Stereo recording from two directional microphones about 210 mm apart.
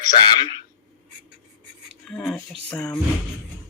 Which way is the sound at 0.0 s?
20° left (ahead or behind).